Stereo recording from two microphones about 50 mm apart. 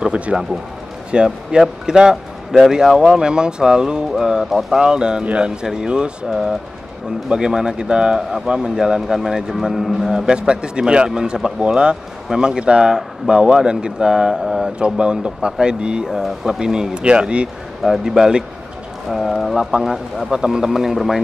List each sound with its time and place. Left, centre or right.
0.0 s a man's voice: right
17.8 s a man's voice: centre